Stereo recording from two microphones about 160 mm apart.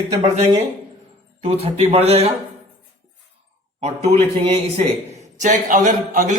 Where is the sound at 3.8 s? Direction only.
40° right (ahead or behind).